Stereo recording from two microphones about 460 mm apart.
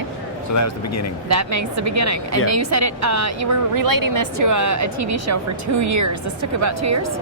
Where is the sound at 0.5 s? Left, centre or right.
Left.